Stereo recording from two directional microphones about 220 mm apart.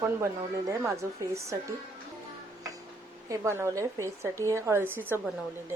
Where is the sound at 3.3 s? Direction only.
10° right (ahead or behind).